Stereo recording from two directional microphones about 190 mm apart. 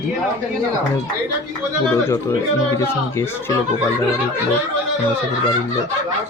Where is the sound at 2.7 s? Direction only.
15° left (ahead or behind).